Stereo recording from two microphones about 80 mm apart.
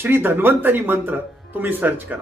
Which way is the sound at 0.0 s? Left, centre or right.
Right.